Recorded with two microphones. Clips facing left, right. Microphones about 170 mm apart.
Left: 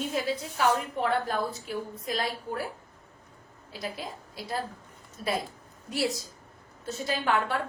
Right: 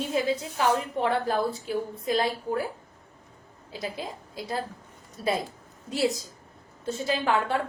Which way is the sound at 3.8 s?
25° right (ahead or behind).